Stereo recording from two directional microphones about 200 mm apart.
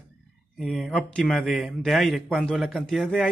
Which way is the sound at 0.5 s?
Centre (ahead or behind).